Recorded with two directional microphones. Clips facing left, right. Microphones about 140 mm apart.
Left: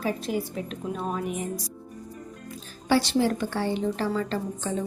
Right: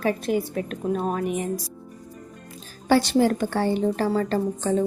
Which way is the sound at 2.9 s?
50° right (ahead or behind).